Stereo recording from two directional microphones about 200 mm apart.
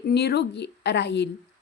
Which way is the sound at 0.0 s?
55° left (ahead or behind).